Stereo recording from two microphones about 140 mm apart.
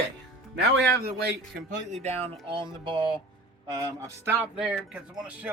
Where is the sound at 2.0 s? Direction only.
50° right (ahead or behind).